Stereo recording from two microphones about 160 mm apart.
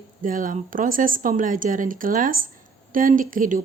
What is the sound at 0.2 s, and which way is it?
A woman's voice, 55° right (ahead or behind).